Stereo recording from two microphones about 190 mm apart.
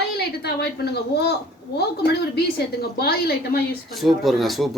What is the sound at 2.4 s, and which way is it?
A woman's voice, 55° left (ahead or behind).